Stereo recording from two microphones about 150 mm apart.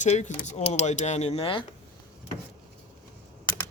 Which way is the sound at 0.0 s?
50° left (ahead or behind).